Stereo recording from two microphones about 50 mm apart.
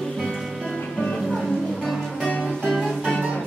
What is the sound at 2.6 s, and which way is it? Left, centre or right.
Music, centre.